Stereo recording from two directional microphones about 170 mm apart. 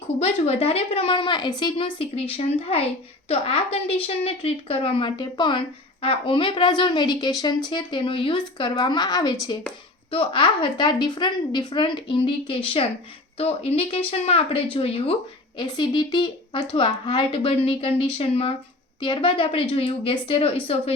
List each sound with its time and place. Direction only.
0.2 s a woman's voice: 35° left (ahead or behind)